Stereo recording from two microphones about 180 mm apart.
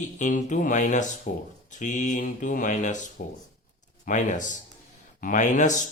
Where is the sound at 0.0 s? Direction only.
40° left (ahead or behind).